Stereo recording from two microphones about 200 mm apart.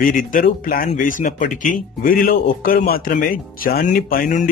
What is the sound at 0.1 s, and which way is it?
Speech, 45° left (ahead or behind).